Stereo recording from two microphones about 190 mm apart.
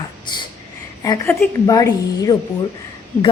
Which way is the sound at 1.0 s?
15° left (ahead or behind).